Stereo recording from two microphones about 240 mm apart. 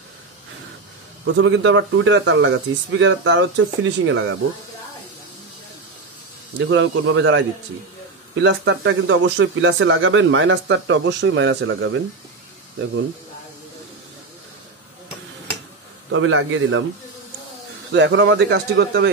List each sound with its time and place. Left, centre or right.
1.2 s speech: right
6.6 s speech: right
16.1 s a man's voice: right
17.9 s speech: right